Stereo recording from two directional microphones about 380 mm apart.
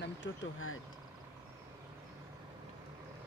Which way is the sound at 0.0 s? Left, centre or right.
Left.